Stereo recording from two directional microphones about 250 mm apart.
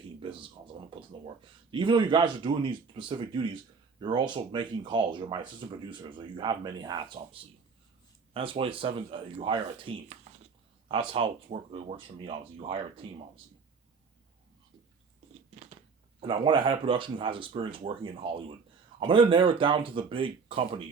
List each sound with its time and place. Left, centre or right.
0.2 s a sound: right
1.7 s speech: centre
16.2 s speech: centre